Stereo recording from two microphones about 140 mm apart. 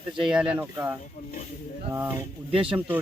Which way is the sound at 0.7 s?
20° right (ahead or behind).